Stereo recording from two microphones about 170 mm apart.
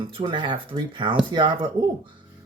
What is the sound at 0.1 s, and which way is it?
Speech, 30° right (ahead or behind).